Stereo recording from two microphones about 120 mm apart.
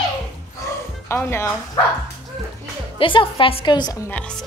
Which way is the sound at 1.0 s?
20° left (ahead or behind).